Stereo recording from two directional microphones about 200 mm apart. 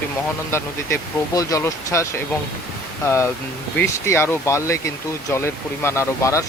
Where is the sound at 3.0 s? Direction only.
10° left (ahead or behind).